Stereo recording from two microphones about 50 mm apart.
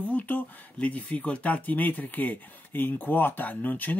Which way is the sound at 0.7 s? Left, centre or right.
Left.